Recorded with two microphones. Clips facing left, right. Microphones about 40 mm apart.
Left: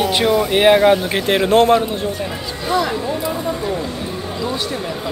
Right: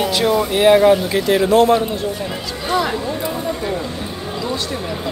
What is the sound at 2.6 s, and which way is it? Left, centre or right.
Speech, centre.